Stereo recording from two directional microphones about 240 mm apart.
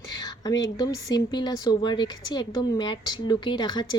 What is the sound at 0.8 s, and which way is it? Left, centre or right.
Speech, centre.